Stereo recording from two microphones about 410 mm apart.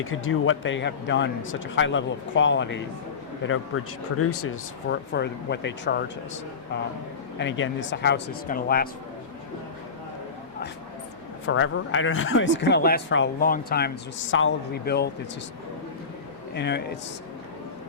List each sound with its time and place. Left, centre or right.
0.0 s speech: left
4.2 s speech: left
7.3 s speech: left
11.4 s speech: left
16.6 s speech: left